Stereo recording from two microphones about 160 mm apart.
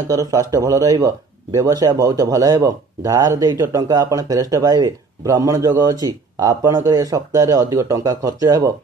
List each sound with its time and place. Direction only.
0.1 s speech: 20° right (ahead or behind)